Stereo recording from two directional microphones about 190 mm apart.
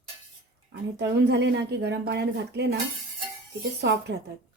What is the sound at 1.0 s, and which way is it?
Speech, 65° right (ahead or behind).